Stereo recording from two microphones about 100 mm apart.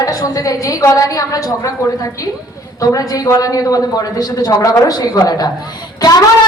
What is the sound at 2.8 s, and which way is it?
A woman's voice, 40° left (ahead or behind).